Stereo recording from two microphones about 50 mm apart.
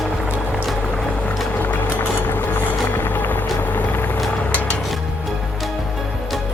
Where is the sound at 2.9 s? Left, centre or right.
Left.